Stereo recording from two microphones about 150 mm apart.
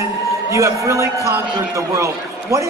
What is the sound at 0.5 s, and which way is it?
Speech, 20° right (ahead or behind).